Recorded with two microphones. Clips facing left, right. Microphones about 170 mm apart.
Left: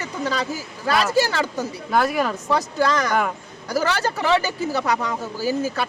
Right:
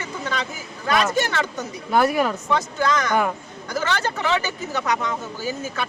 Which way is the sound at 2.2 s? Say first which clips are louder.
Right 1 dB; 5° right (ahead or behind).